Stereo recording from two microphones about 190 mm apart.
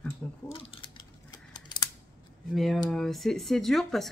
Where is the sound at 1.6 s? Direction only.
25° left (ahead or behind).